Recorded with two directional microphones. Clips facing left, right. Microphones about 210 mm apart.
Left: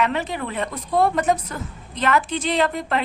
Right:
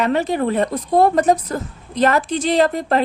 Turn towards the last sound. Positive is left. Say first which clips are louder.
# right 5 dB
turn(degrees=-40)  # may be behind; listen again after turning